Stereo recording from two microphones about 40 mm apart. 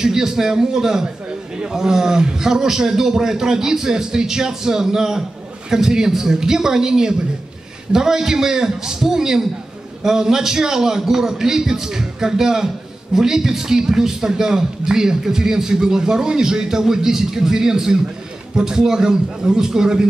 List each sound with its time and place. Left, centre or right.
0.0 s a man's voice: centre